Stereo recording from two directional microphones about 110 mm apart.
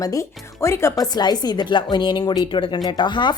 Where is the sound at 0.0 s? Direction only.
30° left (ahead or behind).